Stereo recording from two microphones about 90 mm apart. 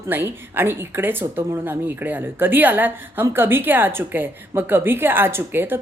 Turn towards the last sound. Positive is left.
turn(degrees=-25)  # may be behind; listen again after turning